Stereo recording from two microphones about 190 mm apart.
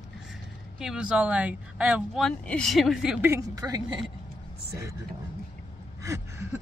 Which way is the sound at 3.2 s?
15° right (ahead or behind).